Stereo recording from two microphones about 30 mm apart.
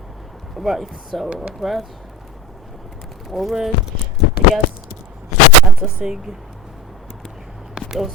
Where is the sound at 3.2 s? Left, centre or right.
Centre.